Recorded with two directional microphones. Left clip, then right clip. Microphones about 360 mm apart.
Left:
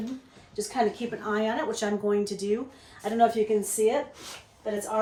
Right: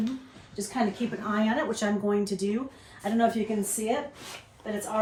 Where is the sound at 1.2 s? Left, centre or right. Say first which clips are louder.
Left 1 dB; centre.